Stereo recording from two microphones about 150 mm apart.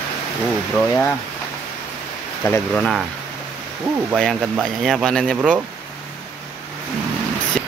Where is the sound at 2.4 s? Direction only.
5° left (ahead or behind).